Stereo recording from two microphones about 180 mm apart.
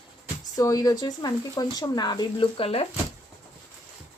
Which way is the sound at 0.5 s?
20° left (ahead or behind).